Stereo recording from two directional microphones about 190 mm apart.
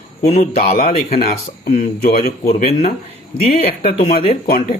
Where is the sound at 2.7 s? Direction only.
35° left (ahead or behind).